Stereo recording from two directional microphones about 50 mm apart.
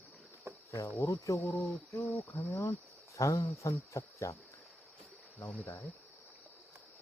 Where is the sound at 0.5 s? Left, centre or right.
Right.